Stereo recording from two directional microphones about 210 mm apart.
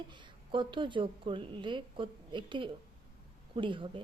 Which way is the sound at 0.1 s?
20° right (ahead or behind).